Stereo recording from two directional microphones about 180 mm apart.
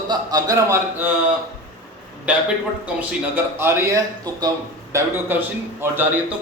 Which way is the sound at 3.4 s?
15° right (ahead or behind).